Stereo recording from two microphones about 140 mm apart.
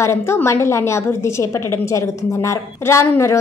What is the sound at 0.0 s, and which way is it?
A woman's voice, 20° left (ahead or behind).